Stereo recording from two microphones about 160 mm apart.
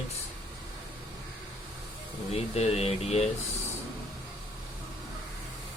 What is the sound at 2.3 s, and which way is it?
Speech, 40° left (ahead or behind).